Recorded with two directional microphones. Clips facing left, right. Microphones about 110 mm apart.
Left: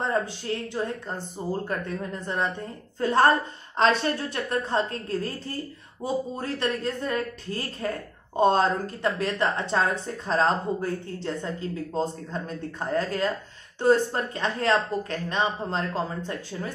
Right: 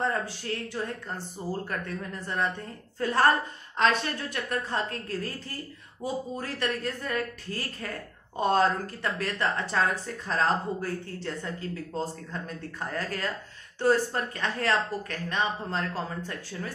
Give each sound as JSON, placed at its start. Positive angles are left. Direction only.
{"t": 0.0, "sound": "speech", "side_deg": 25}